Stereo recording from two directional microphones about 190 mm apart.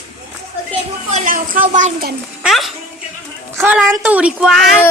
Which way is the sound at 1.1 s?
40° right (ahead or behind).